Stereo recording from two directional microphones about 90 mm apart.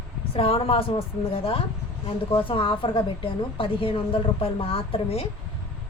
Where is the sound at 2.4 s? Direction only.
80° left.